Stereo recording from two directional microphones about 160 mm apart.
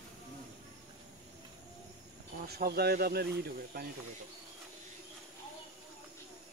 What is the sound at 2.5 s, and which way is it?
Speech, 75° right (ahead or behind).